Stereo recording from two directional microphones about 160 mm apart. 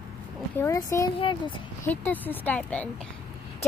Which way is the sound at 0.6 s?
20° left (ahead or behind).